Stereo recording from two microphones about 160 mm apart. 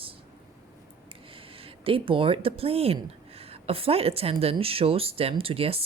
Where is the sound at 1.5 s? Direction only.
35° right (ahead or behind).